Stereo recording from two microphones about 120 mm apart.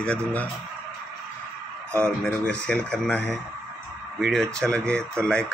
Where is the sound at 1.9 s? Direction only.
10° left (ahead or behind).